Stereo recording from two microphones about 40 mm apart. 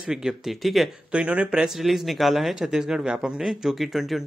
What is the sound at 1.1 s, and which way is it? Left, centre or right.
Speech, right.